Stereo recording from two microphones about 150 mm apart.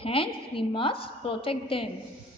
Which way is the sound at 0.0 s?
35° left (ahead or behind).